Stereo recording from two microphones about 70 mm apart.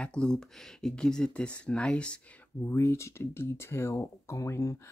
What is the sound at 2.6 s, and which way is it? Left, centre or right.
Speech, left.